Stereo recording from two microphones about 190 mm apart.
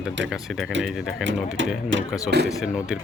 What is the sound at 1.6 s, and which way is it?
Speech, 75° right (ahead or behind).